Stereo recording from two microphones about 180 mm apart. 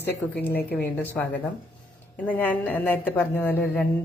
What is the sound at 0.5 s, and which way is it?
Speech, 60° left (ahead or behind).